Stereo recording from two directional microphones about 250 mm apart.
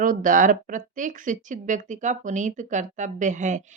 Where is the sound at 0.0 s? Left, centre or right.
Right.